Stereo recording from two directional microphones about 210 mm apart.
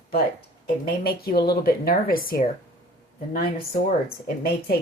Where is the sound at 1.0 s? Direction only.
45° left (ahead or behind).